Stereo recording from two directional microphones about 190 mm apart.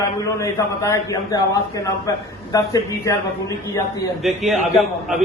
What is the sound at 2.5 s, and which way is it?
Speech, 20° left (ahead or behind).